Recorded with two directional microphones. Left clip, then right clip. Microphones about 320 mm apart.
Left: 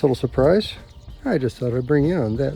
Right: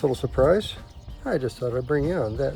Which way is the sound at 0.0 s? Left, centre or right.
Left.